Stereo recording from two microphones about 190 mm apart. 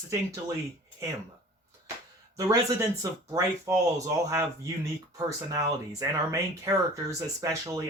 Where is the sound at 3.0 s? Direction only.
15° right (ahead or behind).